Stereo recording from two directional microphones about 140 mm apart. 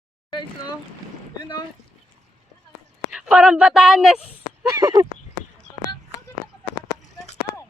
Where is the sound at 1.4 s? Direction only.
35° left (ahead or behind).